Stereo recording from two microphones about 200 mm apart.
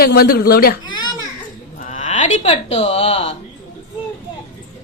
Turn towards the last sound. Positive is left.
turn(degrees=30)  # may be behind; listen again after turning